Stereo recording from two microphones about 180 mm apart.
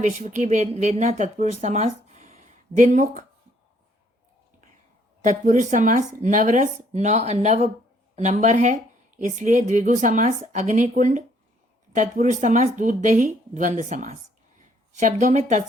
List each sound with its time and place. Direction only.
0.0 s speech: 40° right (ahead or behind)
5.2 s a woman's voice: 45° right (ahead or behind)